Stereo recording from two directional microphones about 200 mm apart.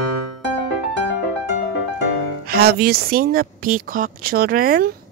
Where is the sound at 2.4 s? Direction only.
50° right (ahead or behind).